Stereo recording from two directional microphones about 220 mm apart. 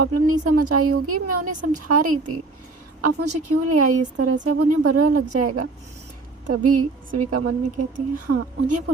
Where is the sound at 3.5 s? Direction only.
90° right.